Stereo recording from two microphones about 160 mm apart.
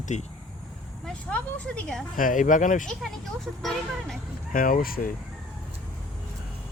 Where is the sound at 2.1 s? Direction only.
55° left (ahead or behind).